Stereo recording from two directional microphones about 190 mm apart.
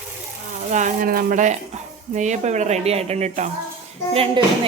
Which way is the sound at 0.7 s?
40° right (ahead or behind).